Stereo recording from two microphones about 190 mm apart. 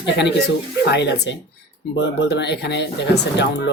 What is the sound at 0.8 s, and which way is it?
Speech, 65° left (ahead or behind).